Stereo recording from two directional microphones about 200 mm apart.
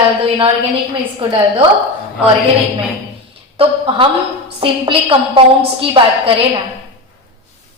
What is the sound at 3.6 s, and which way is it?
A woman's voice, 25° right (ahead or behind).